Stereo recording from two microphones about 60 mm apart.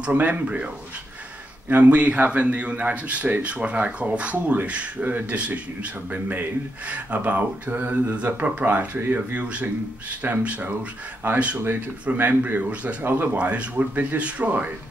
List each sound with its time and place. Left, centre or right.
0.0 s speech: right
1.7 s speech: right